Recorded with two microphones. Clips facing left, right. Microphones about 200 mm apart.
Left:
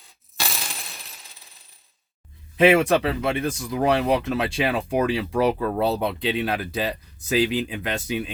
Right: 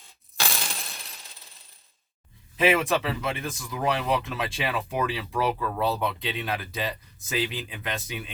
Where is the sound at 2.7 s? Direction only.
50° left (ahead or behind).